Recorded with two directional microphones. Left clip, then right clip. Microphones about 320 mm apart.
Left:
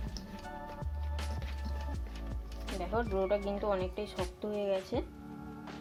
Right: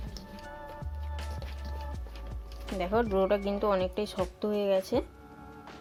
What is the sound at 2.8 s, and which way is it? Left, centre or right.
Speech, right.